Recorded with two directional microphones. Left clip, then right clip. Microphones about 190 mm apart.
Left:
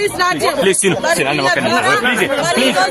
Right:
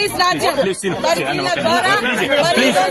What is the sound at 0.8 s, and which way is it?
Speech, 55° left (ahead or behind).